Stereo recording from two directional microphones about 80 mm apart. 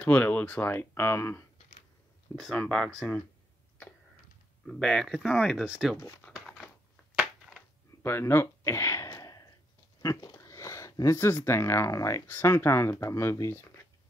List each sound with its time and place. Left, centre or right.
0.0 s speech: centre
2.5 s speech: centre
4.6 s speech: centre
5.2 s speech: left
5.5 s speech: centre
6.3 s a sound: centre
7.2 s crushing: centre
8.0 s a sound: left
11.1 s speech: left
12.3 s speech: left